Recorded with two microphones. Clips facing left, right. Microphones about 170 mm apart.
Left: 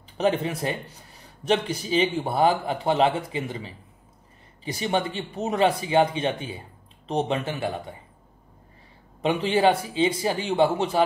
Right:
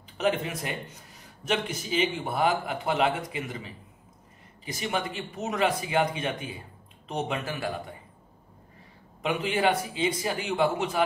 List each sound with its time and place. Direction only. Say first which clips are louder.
0.2 s a man's voice: left 4 dB; 35° left (ahead or behind)
9.2 s a man's voice: left 5 dB; 30° left (ahead or behind)